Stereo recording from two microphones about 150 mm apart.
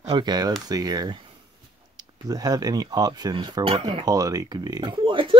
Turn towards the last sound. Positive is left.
turn(degrees=-35)  # may be behind; listen again after turning